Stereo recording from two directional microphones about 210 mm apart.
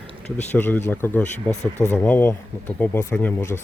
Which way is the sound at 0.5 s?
10° left (ahead or behind).